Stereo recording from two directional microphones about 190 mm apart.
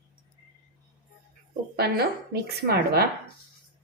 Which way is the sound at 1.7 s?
55° right (ahead or behind).